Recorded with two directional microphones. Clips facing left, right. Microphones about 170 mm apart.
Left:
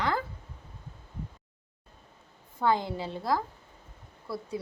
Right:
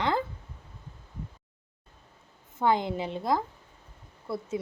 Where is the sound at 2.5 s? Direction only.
20° right (ahead or behind).